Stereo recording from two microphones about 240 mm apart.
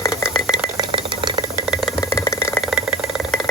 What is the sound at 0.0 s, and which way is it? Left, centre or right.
Rattle, centre.